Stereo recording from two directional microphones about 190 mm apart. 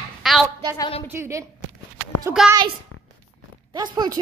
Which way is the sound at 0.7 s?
25° left (ahead or behind).